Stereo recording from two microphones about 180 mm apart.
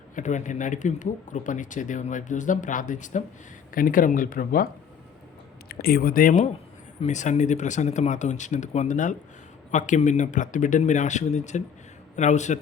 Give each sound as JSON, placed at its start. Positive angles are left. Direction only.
{"t": 0.2, "sound": "speech", "side_deg": 45}